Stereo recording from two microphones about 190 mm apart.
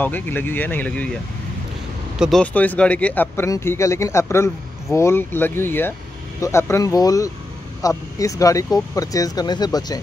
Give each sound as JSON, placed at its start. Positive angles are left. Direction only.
{"t": 0.0, "sound": "speech", "side_deg": 10}
{"t": 2.1, "sound": "speech", "side_deg": 0}